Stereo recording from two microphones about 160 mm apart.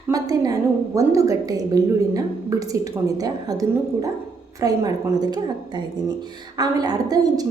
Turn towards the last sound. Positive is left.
turn(degrees=-25)  # may be behind; listen again after turning